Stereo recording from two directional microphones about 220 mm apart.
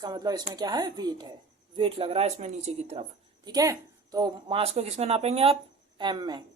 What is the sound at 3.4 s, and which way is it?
A woman's voice, 15° right (ahead or behind).